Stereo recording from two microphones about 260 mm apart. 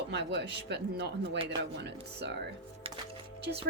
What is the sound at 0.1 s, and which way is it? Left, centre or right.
A woman's voice, right.